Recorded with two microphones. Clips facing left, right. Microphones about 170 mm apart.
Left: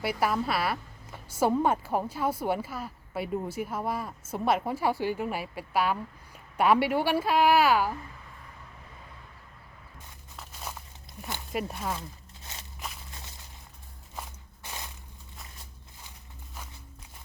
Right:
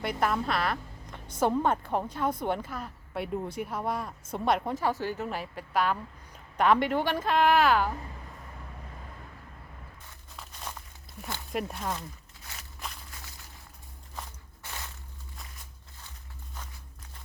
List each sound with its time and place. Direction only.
0.0 s a woman's voice: 5° left (ahead or behind)
10.3 s a sound: 5° left (ahead or behind)
12.4 s walk: 25° left (ahead or behind)
14.2 s walk: 15° left (ahead or behind)